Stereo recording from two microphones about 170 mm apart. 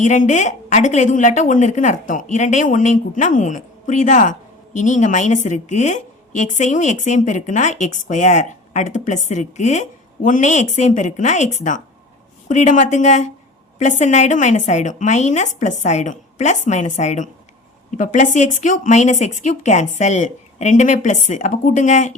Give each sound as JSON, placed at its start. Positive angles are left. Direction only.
{"t": 0.0, "sound": "speech", "side_deg": 45}